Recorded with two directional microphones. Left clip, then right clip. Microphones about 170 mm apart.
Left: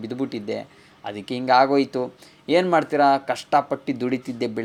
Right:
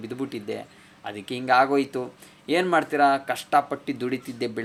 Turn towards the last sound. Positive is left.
turn(degrees=30)  # may be behind; listen again after turning